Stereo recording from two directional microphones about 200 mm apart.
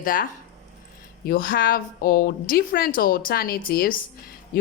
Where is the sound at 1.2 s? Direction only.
45° left (ahead or behind).